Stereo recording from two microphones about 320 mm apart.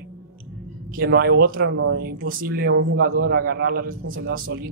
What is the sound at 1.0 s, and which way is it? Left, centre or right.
Speech, right.